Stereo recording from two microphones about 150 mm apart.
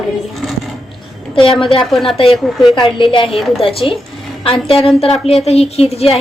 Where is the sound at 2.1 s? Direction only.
40° left (ahead or behind).